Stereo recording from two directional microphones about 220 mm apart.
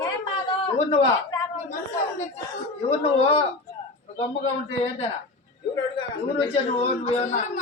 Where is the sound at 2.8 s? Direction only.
25° left (ahead or behind).